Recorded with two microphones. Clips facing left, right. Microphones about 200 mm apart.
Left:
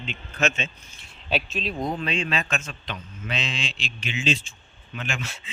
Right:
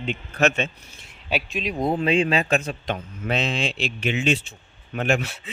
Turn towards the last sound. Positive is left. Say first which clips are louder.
# right 10 dB
turn(degrees=-60)  # may be behind; listen again after turning